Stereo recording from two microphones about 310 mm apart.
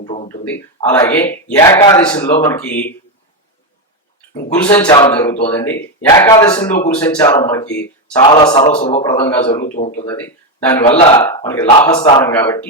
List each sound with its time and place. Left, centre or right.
0.0 s speech: left
0.9 s speech: centre
4.5 s a man's voice: centre
11.2 s speech: centre